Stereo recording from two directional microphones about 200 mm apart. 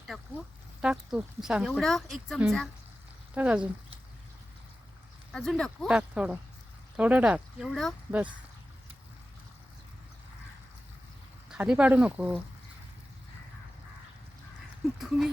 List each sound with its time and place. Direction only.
0.8 s speech: 5° right (ahead or behind)
5.3 s speech: centre (ahead or behind)
11.5 s speech: 5° right (ahead or behind)